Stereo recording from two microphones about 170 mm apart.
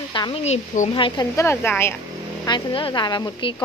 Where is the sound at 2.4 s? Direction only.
25° left (ahead or behind).